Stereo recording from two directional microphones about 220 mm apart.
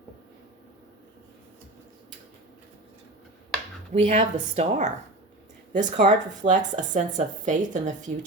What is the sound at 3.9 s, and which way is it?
Speech, 30° right (ahead or behind).